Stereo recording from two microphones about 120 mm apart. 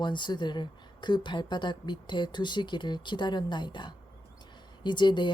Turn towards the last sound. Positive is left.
turn(degrees=40)  # may be behind; listen again after turning